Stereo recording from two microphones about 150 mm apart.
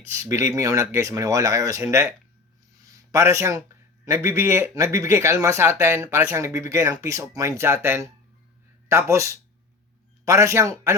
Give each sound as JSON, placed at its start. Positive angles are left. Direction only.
{"t": 0.1, "sound": "speech", "side_deg": -20}